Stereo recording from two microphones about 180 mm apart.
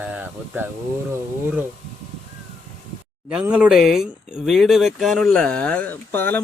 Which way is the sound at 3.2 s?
5° right (ahead or behind).